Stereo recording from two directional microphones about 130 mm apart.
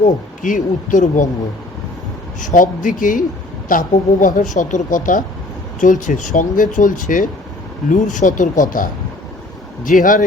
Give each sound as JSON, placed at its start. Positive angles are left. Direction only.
{"t": 0.4, "sound": "speech", "side_deg": 90}
{"t": 2.4, "sound": "speech", "side_deg": 85}
{"t": 5.8, "sound": "speech", "side_deg": 75}
{"t": 7.9, "sound": "speech", "side_deg": 75}